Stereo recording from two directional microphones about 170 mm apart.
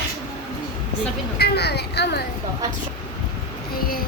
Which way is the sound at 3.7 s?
60° left (ahead or behind).